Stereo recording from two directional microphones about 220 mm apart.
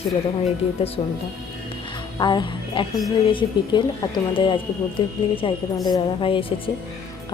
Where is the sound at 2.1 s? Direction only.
20° left (ahead or behind).